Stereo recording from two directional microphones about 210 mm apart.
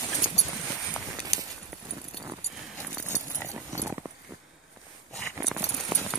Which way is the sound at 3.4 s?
15° right (ahead or behind).